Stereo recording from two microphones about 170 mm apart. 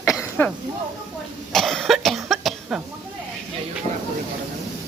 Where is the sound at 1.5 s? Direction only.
Centre (ahead or behind).